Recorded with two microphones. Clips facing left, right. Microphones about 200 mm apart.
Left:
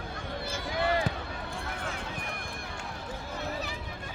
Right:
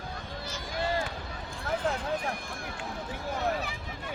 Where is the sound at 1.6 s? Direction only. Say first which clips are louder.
Right 12 dB; 60° left (ahead or behind).